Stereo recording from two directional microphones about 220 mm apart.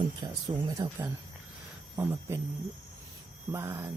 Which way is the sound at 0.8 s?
15° right (ahead or behind).